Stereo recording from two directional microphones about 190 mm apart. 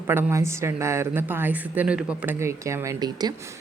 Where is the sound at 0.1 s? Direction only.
10° right (ahead or behind).